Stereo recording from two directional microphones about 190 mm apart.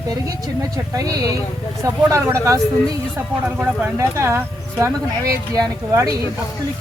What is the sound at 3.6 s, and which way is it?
Speech, 10° right (ahead or behind).